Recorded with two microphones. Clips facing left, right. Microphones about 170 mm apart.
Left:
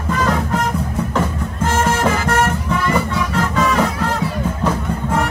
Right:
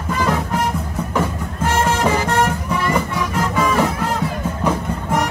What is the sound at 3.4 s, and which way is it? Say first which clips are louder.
Music: even; 10° right (ahead or behind).